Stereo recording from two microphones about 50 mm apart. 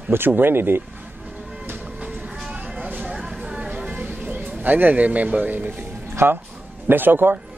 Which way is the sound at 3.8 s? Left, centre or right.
Right.